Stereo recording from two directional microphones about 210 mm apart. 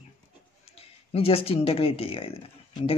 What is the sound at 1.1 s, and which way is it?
Speech, 25° left (ahead or behind).